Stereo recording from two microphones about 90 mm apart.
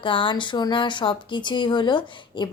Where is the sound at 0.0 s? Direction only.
70° left (ahead or behind).